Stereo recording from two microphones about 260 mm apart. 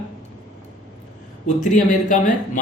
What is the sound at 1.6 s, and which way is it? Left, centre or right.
Speech, left.